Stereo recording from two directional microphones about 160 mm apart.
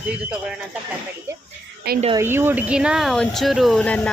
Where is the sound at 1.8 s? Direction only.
80° right.